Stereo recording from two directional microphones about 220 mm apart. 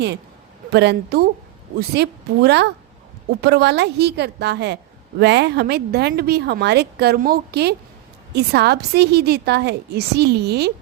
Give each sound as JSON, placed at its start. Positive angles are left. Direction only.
{"t": 0.7, "sound": "a woman's voice", "side_deg": -50}